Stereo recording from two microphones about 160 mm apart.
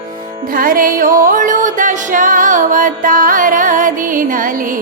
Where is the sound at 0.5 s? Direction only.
60° right (ahead or behind).